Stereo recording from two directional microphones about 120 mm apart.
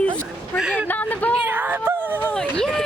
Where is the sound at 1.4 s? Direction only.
15° right (ahead or behind).